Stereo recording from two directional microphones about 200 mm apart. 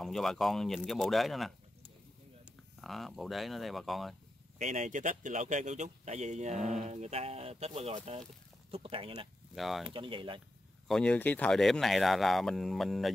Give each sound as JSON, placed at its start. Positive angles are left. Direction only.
{"t": 0.0, "sound": "speech", "side_deg": 0}
{"t": 2.8, "sound": "speech", "side_deg": 0}
{"t": 4.6, "sound": "speech", "side_deg": -35}
{"t": 9.6, "sound": "speech", "side_deg": 0}
{"t": 9.9, "sound": "speech", "side_deg": -25}
{"t": 10.9, "sound": "speech", "side_deg": 5}